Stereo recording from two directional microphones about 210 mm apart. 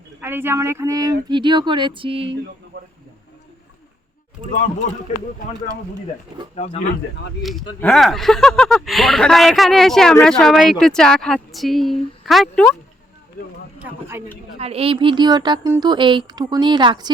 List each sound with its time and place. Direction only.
0.2 s speech: 10° right (ahead or behind); by 2.3 s 25° right (ahead or behind)
7.8 s speech: 5° left (ahead or behind)
13.7 s speech: 10° right (ahead or behind)
14.6 s speech: 30° right (ahead or behind)